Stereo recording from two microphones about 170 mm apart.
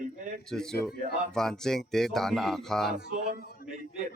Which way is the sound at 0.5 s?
5° left (ahead or behind).